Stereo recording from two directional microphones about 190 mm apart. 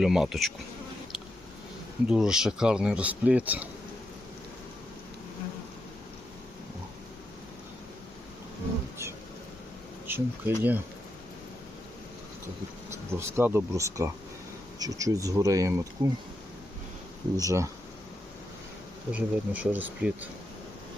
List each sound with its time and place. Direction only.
0.0 s speech: centre (ahead or behind)
2.0 s speech: 5° right (ahead or behind)
10.1 s speech: 10° right (ahead or behind)
12.9 s speech: 15° right (ahead or behind)
17.3 s speech: 15° right (ahead or behind)
19.1 s speech: 10° right (ahead or behind)